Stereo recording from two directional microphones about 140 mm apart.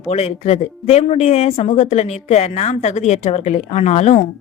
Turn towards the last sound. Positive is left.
turn(degrees=50)  # may be behind; listen again after turning